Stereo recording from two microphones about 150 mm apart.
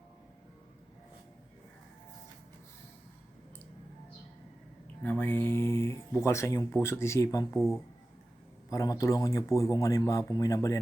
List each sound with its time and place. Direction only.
5.0 s speech: 15° left (ahead or behind)
8.7 s a man's voice: 20° left (ahead or behind)